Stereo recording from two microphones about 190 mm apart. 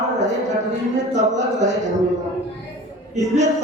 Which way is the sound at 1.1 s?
40° right (ahead or behind).